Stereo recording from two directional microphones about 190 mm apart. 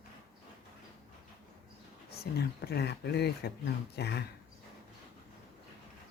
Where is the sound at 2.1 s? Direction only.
55° left (ahead or behind).